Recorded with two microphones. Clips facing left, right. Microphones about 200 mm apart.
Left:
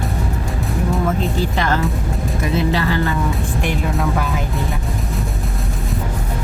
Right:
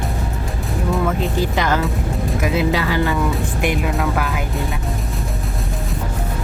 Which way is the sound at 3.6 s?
10° right (ahead or behind).